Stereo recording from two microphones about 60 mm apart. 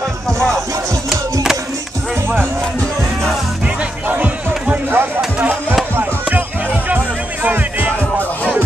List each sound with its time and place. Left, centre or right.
0.3 s music: centre
4.1 s music: right